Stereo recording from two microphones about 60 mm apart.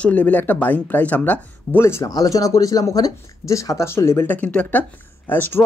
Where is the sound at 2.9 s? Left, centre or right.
Left.